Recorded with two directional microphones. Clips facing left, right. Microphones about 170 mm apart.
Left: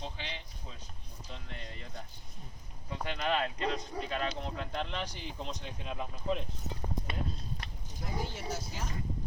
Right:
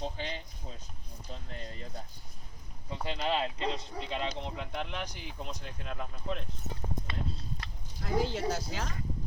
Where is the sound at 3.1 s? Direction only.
25° right (ahead or behind); by 5.5 s 10° right (ahead or behind).